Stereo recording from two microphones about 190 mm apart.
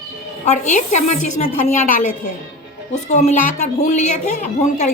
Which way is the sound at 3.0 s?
40° left (ahead or behind).